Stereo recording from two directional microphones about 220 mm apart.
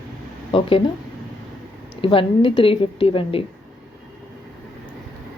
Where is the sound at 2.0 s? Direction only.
25° left (ahead or behind).